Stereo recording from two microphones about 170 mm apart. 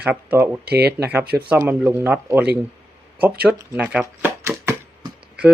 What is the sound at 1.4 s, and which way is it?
Speech, 10° right (ahead or behind).